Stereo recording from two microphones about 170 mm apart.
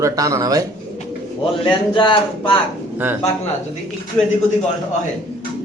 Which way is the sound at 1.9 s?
30° left (ahead or behind).